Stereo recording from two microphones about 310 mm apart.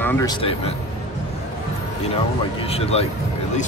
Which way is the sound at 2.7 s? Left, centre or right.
Centre.